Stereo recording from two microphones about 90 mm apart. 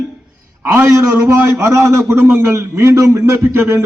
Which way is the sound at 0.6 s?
20° right (ahead or behind).